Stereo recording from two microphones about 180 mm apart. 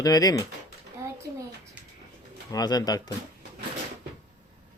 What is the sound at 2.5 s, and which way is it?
Speech, 20° left (ahead or behind).